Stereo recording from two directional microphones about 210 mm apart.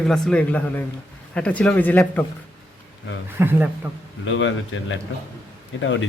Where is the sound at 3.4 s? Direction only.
10° right (ahead or behind).